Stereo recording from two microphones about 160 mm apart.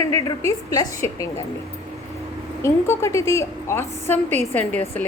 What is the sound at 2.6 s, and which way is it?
A woman's voice, 15° left (ahead or behind).